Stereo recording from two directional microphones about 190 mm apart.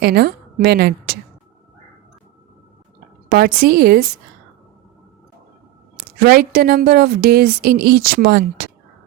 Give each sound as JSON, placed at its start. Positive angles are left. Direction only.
{"t": 0.0, "sound": "a woman's voice", "side_deg": -55}
{"t": 3.2, "sound": "a woman's voice", "side_deg": -50}
{"t": 6.1, "sound": "a woman's voice", "side_deg": -50}